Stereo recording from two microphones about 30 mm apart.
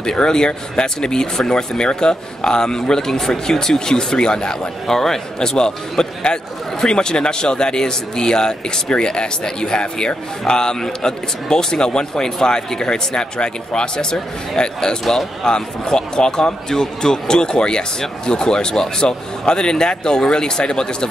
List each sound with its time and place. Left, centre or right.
0.0 s a man's voice: left
4.8 s a man's voice: centre